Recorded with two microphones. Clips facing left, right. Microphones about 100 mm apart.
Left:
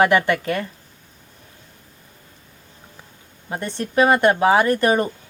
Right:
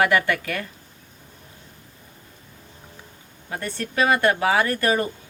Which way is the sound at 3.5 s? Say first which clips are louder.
Left 3 dB; 20° left (ahead or behind).